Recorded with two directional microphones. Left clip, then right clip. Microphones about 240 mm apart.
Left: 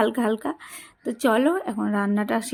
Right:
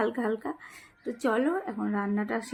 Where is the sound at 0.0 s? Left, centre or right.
Left.